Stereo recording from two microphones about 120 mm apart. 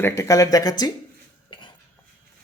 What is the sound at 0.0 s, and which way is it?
Speech, 25° left (ahead or behind).